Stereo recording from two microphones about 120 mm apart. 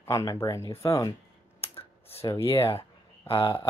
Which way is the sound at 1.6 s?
55° left (ahead or behind).